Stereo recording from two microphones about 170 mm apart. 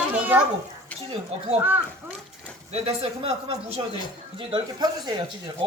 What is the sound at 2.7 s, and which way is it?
Speech, 35° right (ahead or behind).